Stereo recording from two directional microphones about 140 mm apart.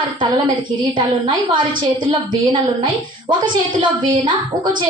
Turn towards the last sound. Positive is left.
turn(degrees=-35)  # may be behind; listen again after turning